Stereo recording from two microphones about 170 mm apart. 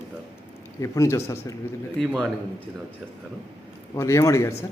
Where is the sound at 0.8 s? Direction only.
15° left (ahead or behind).